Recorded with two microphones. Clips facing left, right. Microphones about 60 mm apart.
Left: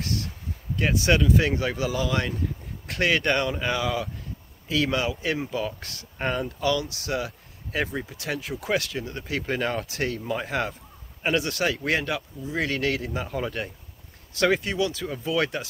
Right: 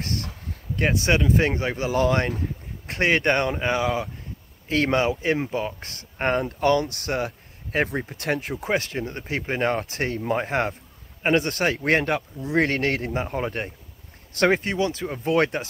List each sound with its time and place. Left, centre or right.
0.0 s a sound: right
0.7 s speech: right
4.6 s speech: right
6.2 s speech: right
8.5 s speech: right
12.4 s speech: right
15.2 s speech: right